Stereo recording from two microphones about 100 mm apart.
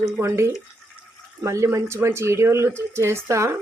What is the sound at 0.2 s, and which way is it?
Speech, 30° right (ahead or behind).